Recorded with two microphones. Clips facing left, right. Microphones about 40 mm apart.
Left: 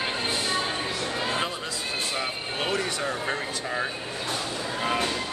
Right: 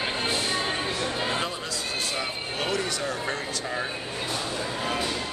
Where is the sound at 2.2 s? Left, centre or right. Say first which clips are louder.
Left 1 dB; left.